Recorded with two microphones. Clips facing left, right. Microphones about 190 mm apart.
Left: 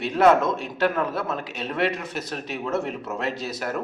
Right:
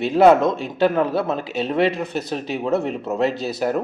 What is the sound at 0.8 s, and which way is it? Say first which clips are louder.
Speech: right 6 dB; 30° right (ahead or behind).